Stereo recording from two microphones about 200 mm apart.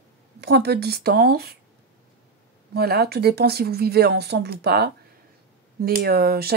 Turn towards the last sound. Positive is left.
turn(degrees=-50)  # may be behind; listen again after turning